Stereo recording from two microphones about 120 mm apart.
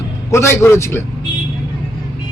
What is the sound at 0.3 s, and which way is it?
Speech, 20° left (ahead or behind).